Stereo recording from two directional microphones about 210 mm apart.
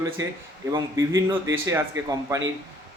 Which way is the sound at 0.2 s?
15° right (ahead or behind).